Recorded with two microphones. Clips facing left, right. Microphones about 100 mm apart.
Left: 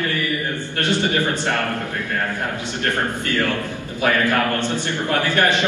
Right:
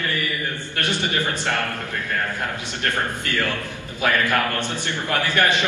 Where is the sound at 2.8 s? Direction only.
20° left (ahead or behind).